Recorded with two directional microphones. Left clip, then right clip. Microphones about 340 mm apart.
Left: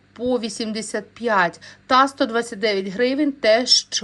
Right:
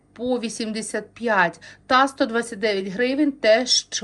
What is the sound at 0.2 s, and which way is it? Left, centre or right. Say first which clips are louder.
A woman's voice: left 2 dB; centre.